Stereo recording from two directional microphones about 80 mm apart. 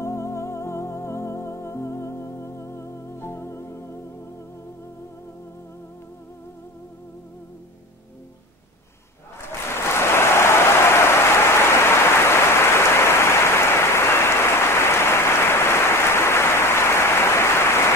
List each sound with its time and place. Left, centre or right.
0.0 s music: left
9.8 s applause: left